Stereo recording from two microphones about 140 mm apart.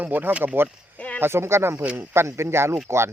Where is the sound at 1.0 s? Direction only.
10° left (ahead or behind).